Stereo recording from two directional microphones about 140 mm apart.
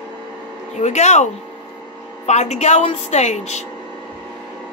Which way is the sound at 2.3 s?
55° left (ahead or behind).